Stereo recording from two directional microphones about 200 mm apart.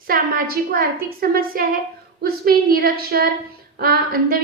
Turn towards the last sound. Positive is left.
turn(degrees=-50)  # may be behind; listen again after turning